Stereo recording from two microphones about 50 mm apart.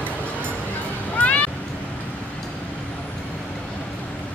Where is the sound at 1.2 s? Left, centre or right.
Left.